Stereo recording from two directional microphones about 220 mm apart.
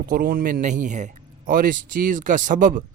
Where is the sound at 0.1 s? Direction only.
40° right (ahead or behind).